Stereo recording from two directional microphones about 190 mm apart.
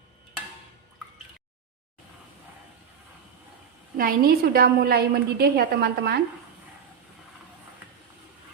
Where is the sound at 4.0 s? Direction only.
50° right (ahead or behind).